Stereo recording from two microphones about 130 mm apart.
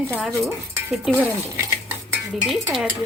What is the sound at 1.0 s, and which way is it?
Speech, 15° right (ahead or behind).